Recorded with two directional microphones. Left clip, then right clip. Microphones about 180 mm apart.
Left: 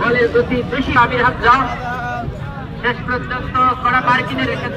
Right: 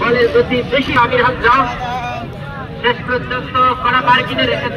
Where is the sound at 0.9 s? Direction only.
20° left (ahead or behind).